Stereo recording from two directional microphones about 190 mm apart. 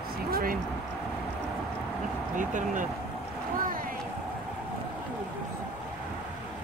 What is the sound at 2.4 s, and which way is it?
Speech, 40° right (ahead or behind).